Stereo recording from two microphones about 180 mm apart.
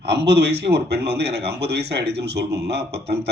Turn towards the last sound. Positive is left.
turn(degrees=-65)  # may be behind; listen again after turning